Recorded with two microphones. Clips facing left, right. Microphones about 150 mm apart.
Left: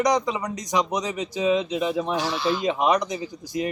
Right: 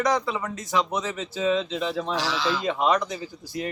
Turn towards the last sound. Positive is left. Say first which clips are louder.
# left 4 dB
turn(degrees=15)  # may be behind; listen again after turning